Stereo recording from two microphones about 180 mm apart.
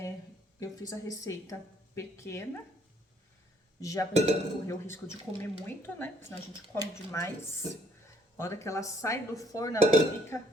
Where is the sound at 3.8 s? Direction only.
20° left (ahead or behind).